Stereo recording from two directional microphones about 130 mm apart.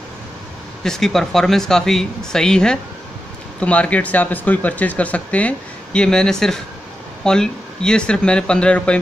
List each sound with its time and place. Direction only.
0.8 s speech: 5° left (ahead or behind)